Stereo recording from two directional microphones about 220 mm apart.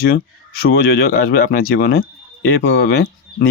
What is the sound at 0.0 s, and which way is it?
Speech, 45° left (ahead or behind).